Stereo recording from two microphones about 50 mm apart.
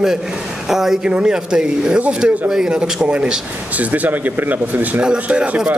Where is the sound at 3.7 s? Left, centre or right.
Right.